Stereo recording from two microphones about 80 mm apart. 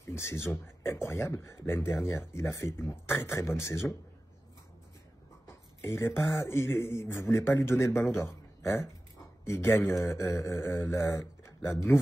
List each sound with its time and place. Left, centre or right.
0.0 s speech: left
5.8 s speech: left
9.4 s speech: left